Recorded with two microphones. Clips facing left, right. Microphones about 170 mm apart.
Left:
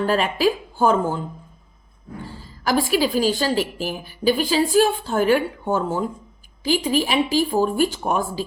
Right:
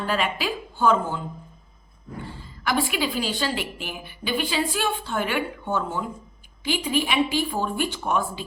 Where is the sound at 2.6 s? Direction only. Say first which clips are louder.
Left 5 dB; 40° left (ahead or behind).